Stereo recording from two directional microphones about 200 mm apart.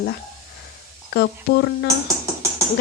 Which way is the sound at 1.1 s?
55° left (ahead or behind).